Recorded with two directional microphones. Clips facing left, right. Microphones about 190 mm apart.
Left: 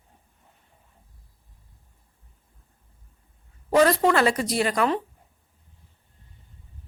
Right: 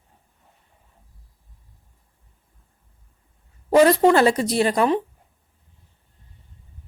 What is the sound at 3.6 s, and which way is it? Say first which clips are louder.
A woman's voice: right 4 dB; 25° right (ahead or behind).